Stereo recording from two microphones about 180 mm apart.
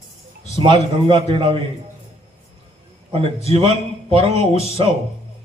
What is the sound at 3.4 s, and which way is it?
Speech, 35° right (ahead or behind).